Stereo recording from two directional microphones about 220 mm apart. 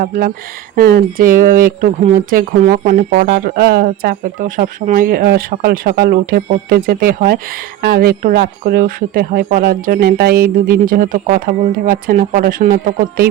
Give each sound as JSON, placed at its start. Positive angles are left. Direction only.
{"t": 0.0, "sound": "speech", "side_deg": -40}